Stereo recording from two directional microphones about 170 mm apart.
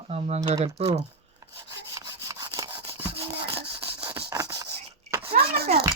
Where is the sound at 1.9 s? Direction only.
20° right (ahead or behind).